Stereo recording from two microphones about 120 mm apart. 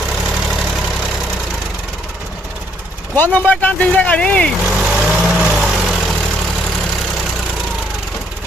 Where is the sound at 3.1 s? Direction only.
15° left (ahead or behind).